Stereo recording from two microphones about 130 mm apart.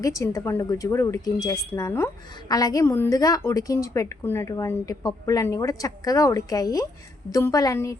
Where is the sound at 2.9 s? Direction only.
15° left (ahead or behind).